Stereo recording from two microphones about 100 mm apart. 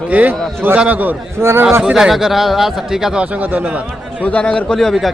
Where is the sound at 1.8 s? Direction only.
5° right (ahead or behind).